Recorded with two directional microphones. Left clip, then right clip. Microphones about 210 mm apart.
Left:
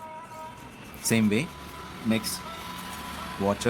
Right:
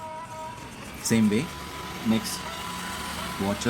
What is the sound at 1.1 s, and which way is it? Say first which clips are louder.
Speech: right 1 dB; 45° left (ahead or behind).